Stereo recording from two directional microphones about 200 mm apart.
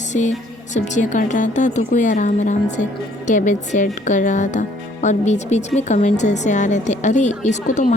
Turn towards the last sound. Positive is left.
turn(degrees=40)  # may be behind; listen again after turning